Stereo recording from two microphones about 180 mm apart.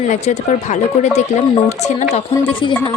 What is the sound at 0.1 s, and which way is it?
Speech, 40° left (ahead or behind).